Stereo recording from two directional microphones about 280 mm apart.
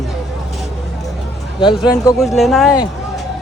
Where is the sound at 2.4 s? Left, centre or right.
Centre.